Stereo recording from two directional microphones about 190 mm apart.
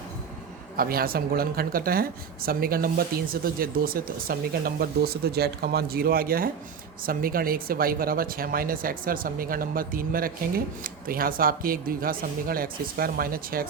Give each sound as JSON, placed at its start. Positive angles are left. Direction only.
{"t": 0.8, "sound": "speech", "side_deg": -50}